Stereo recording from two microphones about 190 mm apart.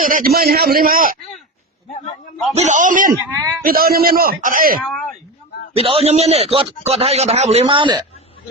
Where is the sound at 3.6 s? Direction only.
50° right (ahead or behind).